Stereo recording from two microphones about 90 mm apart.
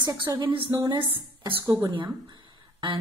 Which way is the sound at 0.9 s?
70° right (ahead or behind).